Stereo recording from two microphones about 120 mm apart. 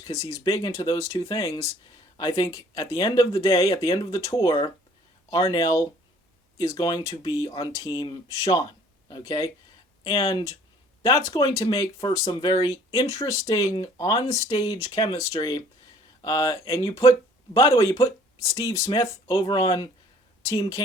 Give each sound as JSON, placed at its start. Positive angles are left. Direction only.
{"t": 0.0, "sound": "speech", "side_deg": 30}